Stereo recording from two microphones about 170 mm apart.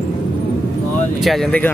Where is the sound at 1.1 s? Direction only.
Centre (ahead or behind).